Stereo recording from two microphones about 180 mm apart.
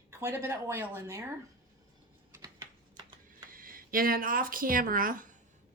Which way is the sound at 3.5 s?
50° right (ahead or behind).